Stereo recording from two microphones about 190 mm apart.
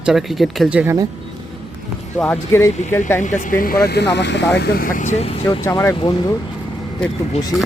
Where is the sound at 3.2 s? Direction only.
40° left (ahead or behind); by 4.4 s 65° left (ahead or behind).